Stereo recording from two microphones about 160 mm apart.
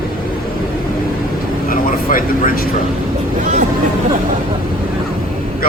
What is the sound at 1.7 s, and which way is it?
Vehicle, 60° left (ahead or behind).